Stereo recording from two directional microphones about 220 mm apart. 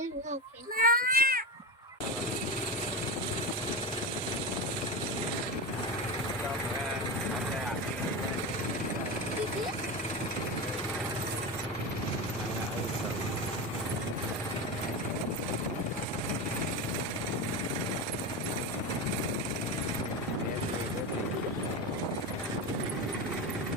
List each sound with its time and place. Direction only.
0.8 s baby cry: 40° right (ahead or behind)